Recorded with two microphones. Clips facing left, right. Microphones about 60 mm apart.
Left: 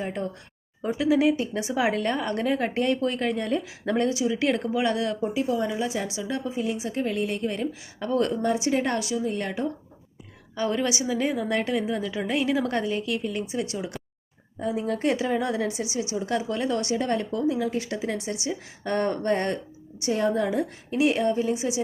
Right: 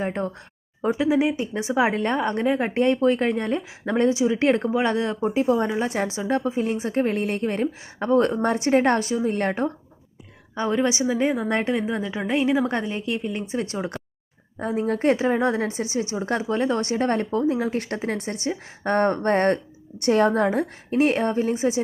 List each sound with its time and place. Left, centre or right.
0.0 s a woman's voice: right
10.5 s a woman's voice: right